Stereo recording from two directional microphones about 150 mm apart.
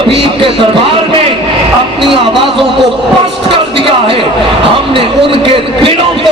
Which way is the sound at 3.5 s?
35° right (ahead or behind).